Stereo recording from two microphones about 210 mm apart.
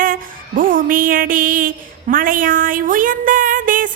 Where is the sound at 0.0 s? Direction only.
40° right (ahead or behind).